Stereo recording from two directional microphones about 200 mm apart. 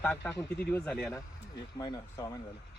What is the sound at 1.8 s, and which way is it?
Speech, 20° left (ahead or behind).